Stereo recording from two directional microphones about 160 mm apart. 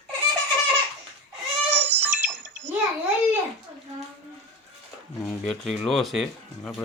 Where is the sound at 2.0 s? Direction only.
10° right (ahead or behind).